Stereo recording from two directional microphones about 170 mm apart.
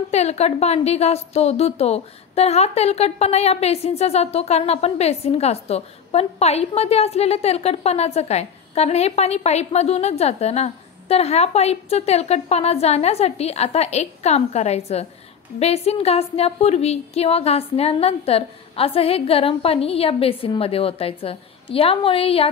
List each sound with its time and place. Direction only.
0.1 s a woman's voice: 40° left (ahead or behind)